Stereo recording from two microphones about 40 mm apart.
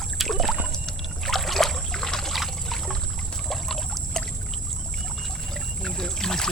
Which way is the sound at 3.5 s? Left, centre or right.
Centre.